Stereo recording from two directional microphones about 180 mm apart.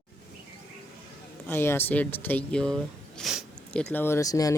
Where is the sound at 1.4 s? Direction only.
15° left (ahead or behind).